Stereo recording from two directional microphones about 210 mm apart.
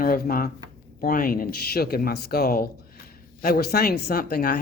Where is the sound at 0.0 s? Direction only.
45° left (ahead or behind).